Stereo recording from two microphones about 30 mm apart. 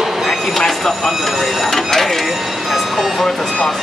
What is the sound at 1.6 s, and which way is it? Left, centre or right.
Speech, centre.